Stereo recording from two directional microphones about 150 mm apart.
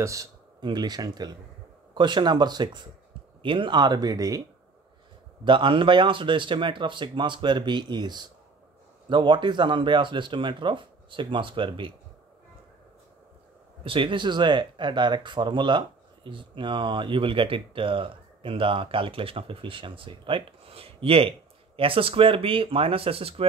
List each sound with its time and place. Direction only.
0.0 s speech: 20° right (ahead or behind)
5.4 s speech: 35° right (ahead or behind)
13.8 s speech: 35° right (ahead or behind)